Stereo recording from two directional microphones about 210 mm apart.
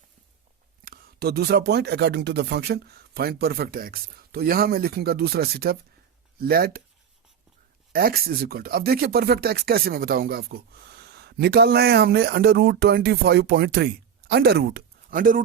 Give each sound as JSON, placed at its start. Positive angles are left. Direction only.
{"t": 0.9, "sound": "speech", "side_deg": -50}
{"t": 7.9, "sound": "speech", "side_deg": -45}